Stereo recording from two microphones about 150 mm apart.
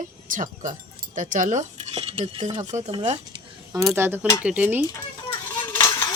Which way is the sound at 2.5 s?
50° right (ahead or behind).